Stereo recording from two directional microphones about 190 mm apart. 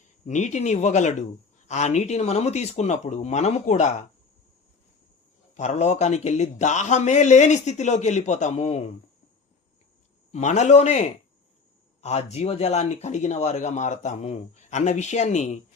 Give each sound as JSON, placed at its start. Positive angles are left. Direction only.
{"t": 0.3, "sound": "speech", "side_deg": 40}
{"t": 5.5, "sound": "speech", "side_deg": 35}
{"t": 10.3, "sound": "speech", "side_deg": 40}
{"t": 12.0, "sound": "speech", "side_deg": 35}